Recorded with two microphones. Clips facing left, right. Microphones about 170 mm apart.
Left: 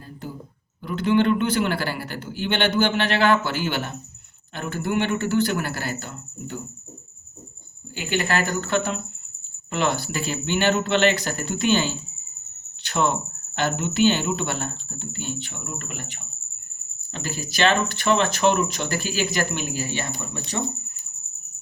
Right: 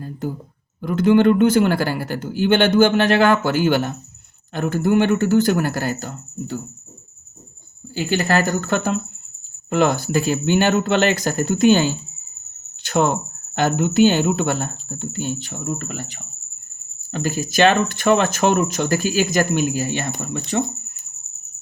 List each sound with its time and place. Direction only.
0.0 s a sound: 45° right (ahead or behind)
0.8 s speech: 45° right (ahead or behind)
7.9 s speech: 40° right (ahead or behind)